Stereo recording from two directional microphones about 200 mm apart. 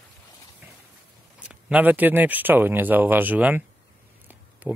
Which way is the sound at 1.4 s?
5° right (ahead or behind).